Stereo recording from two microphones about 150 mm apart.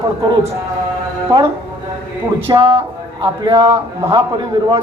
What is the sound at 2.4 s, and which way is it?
Speech, 30° right (ahead or behind).